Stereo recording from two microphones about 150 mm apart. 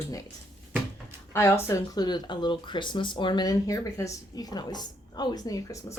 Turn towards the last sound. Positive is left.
turn(degrees=20)  # may be behind; listen again after turning